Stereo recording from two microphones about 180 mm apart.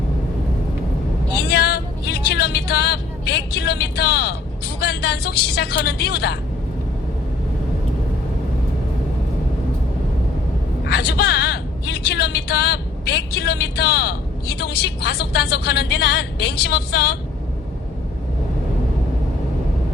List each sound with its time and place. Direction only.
1.5 s vehicle: 60° left (ahead or behind)
4.8 s a woman's voice: 65° left (ahead or behind)
10.8 s a sound: 65° left (ahead or behind)
14.6 s a woman's voice: 65° left (ahead or behind)